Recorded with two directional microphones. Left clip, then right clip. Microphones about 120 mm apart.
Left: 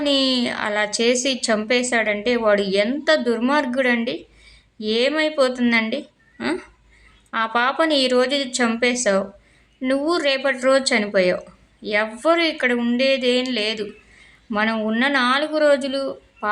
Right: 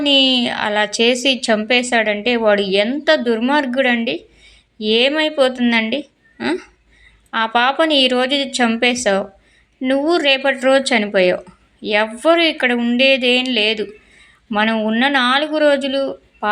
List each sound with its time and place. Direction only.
0.0 s speech: 15° right (ahead or behind)